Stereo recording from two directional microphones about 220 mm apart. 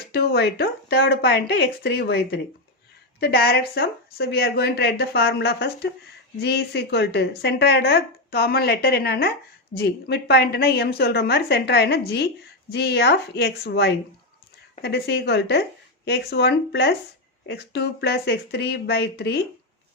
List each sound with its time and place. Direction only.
0.1 s a woman's voice: 45° left (ahead or behind)